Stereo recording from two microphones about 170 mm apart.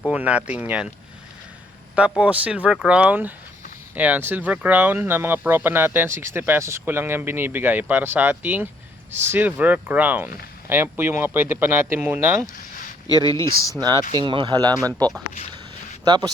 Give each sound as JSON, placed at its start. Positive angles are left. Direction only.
{"t": 0.1, "sound": "speech", "side_deg": -5}
{"t": 2.0, "sound": "speech", "side_deg": -5}
{"t": 13.1, "sound": "speech", "side_deg": 20}
{"t": 13.7, "sound": "speech", "side_deg": -25}
{"t": 14.8, "sound": "speech", "side_deg": 10}
{"t": 16.0, "sound": "speech", "side_deg": -25}